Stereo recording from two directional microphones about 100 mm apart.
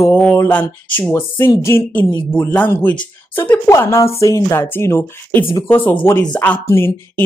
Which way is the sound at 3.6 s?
30° left (ahead or behind).